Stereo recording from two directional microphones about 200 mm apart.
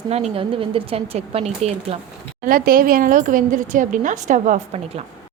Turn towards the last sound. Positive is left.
turn(degrees=-40)  # may be behind; listen again after turning